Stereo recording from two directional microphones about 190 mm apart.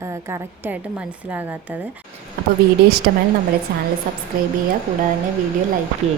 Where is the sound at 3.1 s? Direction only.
60° right (ahead or behind).